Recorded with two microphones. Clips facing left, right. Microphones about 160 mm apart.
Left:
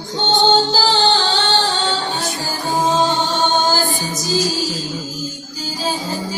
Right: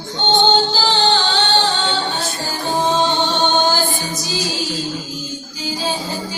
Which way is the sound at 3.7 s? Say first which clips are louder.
Left 1 dB; 40° left (ahead or behind).